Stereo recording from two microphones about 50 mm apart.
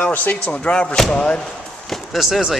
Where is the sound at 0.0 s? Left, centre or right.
Left.